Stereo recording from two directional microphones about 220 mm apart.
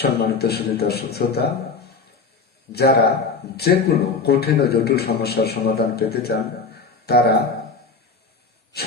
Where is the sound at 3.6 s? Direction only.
45° left (ahead or behind).